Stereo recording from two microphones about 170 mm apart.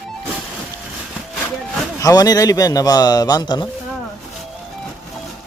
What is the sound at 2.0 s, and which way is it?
A man's voice, 20° left (ahead or behind).